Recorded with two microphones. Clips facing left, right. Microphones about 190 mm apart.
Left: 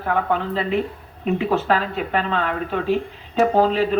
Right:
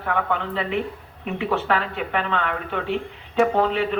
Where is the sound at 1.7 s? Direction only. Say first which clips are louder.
Left 3 dB; 35° left (ahead or behind).